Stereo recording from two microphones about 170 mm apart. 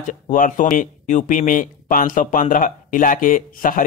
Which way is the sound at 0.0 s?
50° left (ahead or behind).